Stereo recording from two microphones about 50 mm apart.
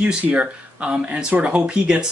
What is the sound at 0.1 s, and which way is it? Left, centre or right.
Speech, right.